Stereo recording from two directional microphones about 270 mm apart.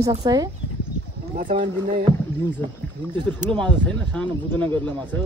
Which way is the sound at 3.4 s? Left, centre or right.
Centre.